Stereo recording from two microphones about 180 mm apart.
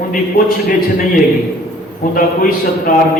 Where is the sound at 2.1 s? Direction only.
50° left (ahead or behind).